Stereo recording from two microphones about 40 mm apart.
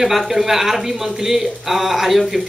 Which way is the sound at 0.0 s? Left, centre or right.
Centre.